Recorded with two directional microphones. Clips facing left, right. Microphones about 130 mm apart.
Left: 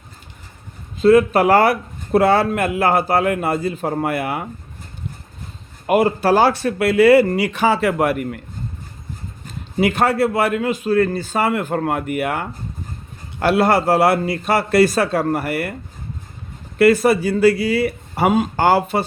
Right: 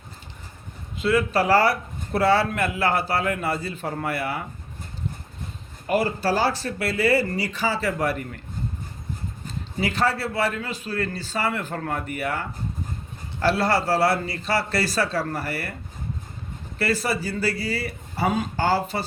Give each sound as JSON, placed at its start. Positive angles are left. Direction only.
{"t": 1.0, "sound": "speech", "side_deg": 50}
{"t": 5.9, "sound": "speech", "side_deg": 55}
{"t": 9.8, "sound": "speech", "side_deg": 55}
{"t": 16.7, "sound": "speech", "side_deg": 50}